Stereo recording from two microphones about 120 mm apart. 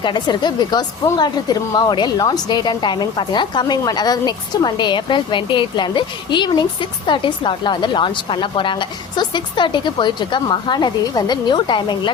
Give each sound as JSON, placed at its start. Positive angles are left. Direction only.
{"t": 0.0, "sound": "a woman's voice", "side_deg": 40}